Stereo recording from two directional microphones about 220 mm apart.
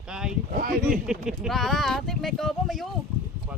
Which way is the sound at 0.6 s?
40° right (ahead or behind).